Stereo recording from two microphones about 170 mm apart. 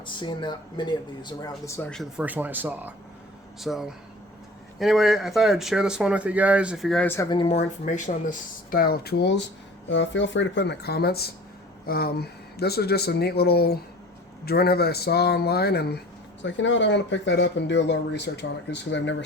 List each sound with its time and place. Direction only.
0.0 s speech: 30° left (ahead or behind)
1.9 s speech: centre (ahead or behind)
2.2 s speech: 10° right (ahead or behind); by 7.3 s 10° left (ahead or behind)
7.3 s speech: 30° left (ahead or behind)
7.5 s speech: 45° left (ahead or behind); by 9.4 s 80° left
9.9 s speech: 90° left; by 16.0 s 70° left (ahead or behind)
16.4 s speech: 90° left